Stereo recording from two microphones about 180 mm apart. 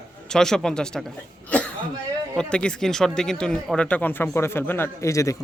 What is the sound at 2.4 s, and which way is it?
A man's voice, 5° left (ahead or behind).